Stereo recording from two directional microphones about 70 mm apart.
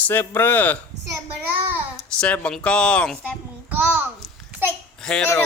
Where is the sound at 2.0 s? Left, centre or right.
Centre.